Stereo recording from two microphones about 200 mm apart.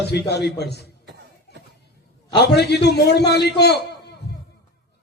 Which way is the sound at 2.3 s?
55° left (ahead or behind).